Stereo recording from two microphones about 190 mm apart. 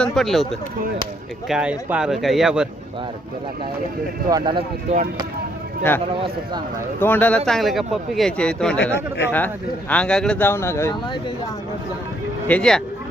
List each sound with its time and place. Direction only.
0.0 s speech: centre (ahead or behind)
4.3 s speech: 20° right (ahead or behind)
4.9 s speech: 35° right (ahead or behind)
7.0 s speech: 10° left (ahead or behind)
9.9 s speech: 5° left (ahead or behind)
12.5 s speech: 5° left (ahead or behind)